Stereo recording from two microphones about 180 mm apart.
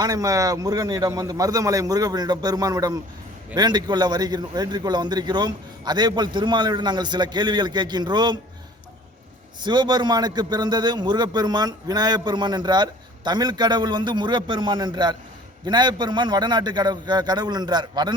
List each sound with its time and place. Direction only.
0.0 s a man's voice: 20° right (ahead or behind)
9.6 s a man's voice: 25° right (ahead or behind)